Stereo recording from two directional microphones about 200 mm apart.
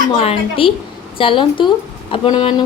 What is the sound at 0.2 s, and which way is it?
A woman's voice, 30° left (ahead or behind).